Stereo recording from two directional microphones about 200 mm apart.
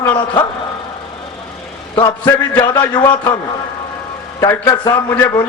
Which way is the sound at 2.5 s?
20° left (ahead or behind).